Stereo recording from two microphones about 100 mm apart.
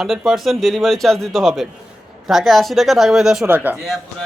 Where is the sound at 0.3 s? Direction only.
Centre (ahead or behind).